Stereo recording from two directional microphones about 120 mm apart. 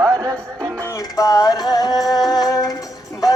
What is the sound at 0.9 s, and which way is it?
Music, 30° left (ahead or behind).